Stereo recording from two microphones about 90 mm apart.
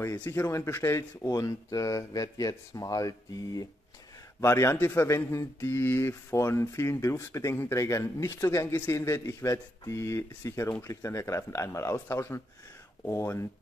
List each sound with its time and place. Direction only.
0.0 s speech: 35° left (ahead or behind)
1.3 s speech: 40° left (ahead or behind)